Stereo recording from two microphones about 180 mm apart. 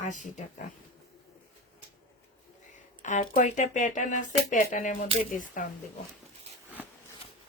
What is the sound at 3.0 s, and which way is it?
Speech, 45° left (ahead or behind).